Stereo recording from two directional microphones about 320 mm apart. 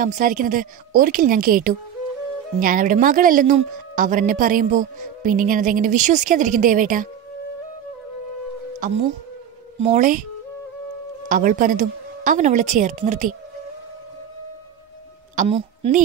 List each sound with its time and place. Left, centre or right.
0.0 s speech: right
8.7 s speech: right
11.2 s speech: right
15.3 s a woman's voice: centre